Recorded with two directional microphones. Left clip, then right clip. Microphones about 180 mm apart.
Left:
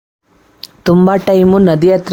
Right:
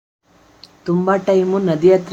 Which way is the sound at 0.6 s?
45° left (ahead or behind).